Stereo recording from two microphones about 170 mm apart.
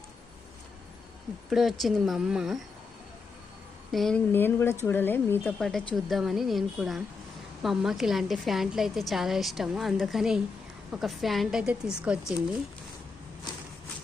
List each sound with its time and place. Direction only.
1.5 s a woman's voice: centre (ahead or behind)
3.9 s a woman's voice: centre (ahead or behind)
4.3 s a woman's voice: 10° left (ahead or behind); by 12.2 s 5° right (ahead or behind)